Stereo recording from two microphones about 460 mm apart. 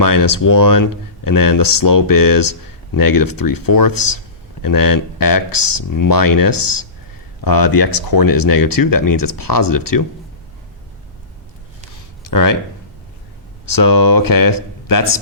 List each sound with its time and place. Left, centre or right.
0.0 s speech: left
12.2 s speech: left
13.7 s speech: left